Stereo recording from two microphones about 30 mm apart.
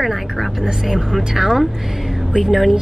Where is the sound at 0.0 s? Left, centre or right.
Centre.